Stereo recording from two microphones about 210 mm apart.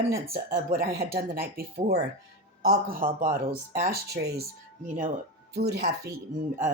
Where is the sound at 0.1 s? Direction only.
45° right (ahead or behind).